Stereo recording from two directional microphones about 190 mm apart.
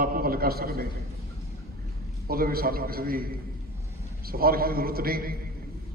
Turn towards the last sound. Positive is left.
turn(degrees=-50)  # may be behind; listen again after turning